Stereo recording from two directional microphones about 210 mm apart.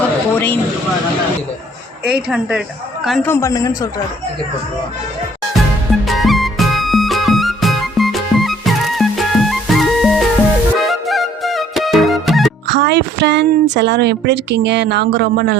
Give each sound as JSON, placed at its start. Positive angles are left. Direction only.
{"t": 0.3, "sound": "speech", "side_deg": 10}
{"t": 2.0, "sound": "a woman's voice", "side_deg": -5}
{"t": 3.2, "sound": "a man's voice", "side_deg": 15}
{"t": 5.9, "sound": "music", "side_deg": 0}
{"t": 12.6, "sound": "speech", "side_deg": -55}